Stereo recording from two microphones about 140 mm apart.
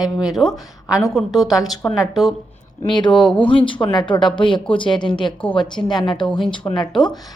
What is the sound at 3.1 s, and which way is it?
Speech, 5° left (ahead or behind).